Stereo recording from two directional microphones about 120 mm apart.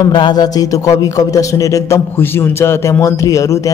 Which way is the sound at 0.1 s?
35° left (ahead or behind).